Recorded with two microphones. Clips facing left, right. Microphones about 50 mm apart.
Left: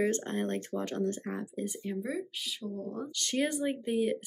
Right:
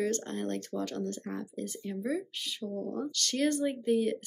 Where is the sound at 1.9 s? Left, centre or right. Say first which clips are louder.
Right 5 dB; centre.